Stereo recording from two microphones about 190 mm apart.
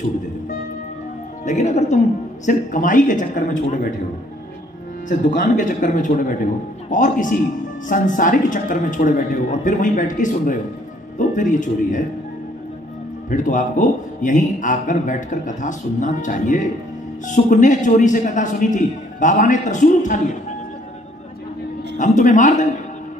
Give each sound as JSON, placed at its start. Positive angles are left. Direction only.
{"t": 1.4, "sound": "a man's voice", "side_deg": 40}
{"t": 5.0, "sound": "a man's voice", "side_deg": 45}
{"t": 13.3, "sound": "a man's voice", "side_deg": 40}
{"t": 21.9, "sound": "a man's voice", "side_deg": 40}